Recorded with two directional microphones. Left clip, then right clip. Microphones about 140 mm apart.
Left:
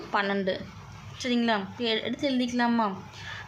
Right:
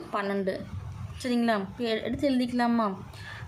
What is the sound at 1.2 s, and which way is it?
A woman's voice, 15° right (ahead or behind).